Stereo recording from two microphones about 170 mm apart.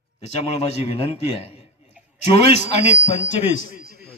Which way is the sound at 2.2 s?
40° left (ahead or behind).